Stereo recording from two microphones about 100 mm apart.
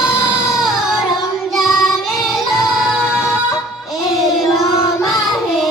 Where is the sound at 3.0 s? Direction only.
25° left (ahead or behind).